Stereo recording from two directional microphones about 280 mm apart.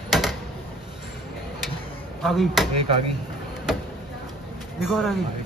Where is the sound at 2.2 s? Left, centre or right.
Centre.